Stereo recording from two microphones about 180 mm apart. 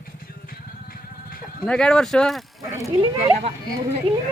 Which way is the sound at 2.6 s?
20° right (ahead or behind).